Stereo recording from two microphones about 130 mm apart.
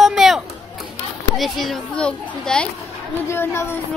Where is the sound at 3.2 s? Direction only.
20° left (ahead or behind).